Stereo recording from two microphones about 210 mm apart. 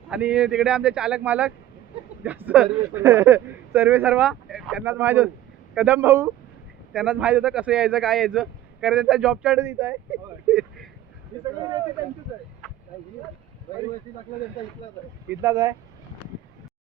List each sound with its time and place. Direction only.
0.1 s speech: 5° right (ahead or behind)
11.3 s speech: 20° right (ahead or behind)
15.3 s speech: 10° right (ahead or behind)